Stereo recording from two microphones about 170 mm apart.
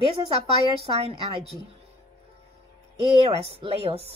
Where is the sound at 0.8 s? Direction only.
35° right (ahead or behind).